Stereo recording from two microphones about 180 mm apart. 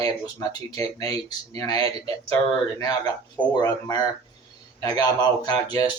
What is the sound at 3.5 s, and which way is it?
Speech, 20° left (ahead or behind).